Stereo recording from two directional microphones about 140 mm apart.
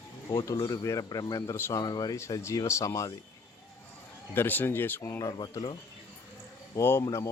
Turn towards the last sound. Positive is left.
turn(degrees=20)  # may be behind; listen again after turning